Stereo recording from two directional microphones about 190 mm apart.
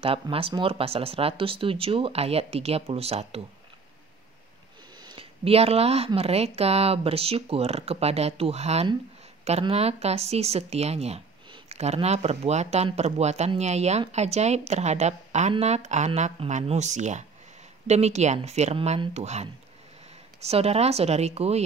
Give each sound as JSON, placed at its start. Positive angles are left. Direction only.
{"t": 0.0, "sound": "speech", "side_deg": -30}
{"t": 5.0, "sound": "speech", "side_deg": -30}